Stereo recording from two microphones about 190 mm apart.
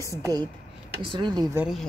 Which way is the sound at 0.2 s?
20° right (ahead or behind).